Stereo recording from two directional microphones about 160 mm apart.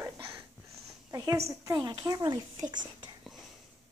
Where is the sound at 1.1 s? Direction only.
20° right (ahead or behind).